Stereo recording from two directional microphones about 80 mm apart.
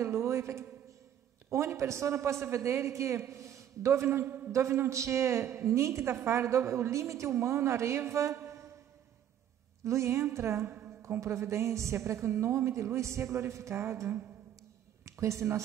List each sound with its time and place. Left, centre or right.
0.0 s a man's voice: right
9.8 s a woman's voice: right